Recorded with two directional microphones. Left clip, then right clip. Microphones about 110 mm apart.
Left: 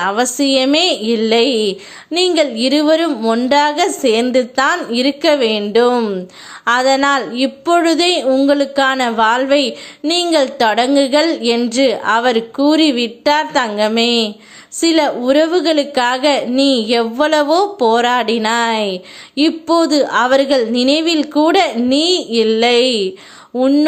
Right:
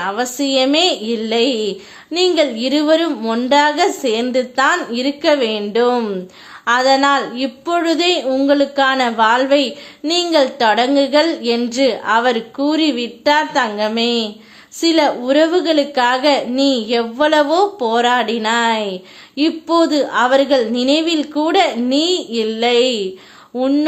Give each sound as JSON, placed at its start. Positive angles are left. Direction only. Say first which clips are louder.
{"t": 0.0, "sound": "a woman's voice", "louder": "left 4 dB", "side_deg": 35}